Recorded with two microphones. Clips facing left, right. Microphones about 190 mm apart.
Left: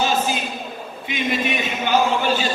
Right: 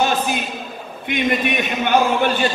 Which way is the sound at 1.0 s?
60° right (ahead or behind).